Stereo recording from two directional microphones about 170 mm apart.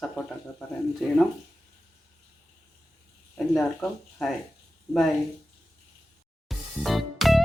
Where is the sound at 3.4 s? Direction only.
Centre (ahead or behind).